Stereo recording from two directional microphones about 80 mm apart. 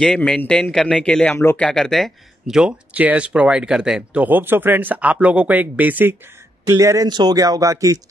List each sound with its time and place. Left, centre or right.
0.2 s speech: centre
1.3 s speech: left
1.6 s speech: centre
2.9 s speech: centre
4.2 s speech: right
6.6 s speech: right
7.1 s speech: right